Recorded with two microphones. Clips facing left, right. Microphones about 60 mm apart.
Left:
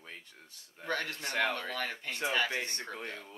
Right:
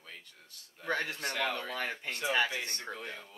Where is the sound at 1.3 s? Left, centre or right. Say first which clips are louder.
Left 3 dB; left.